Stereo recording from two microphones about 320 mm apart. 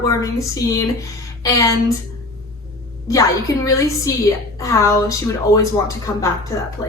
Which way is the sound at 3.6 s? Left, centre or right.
Centre.